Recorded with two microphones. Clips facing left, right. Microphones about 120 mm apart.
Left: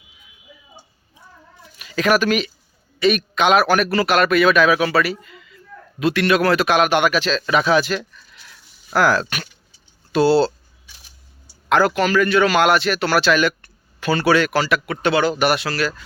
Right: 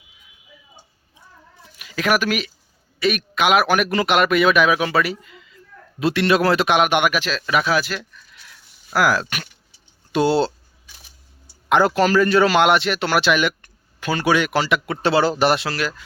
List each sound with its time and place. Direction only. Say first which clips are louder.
1.8 s a man's voice: left 3 dB; 10° right (ahead or behind)
11.7 s speech: even; 25° right (ahead or behind)
12.0 s speech: right 1 dB; 35° right (ahead or behind); by 16.0 s 20° right (ahead or behind)